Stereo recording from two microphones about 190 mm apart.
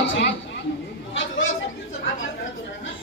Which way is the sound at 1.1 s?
90° left.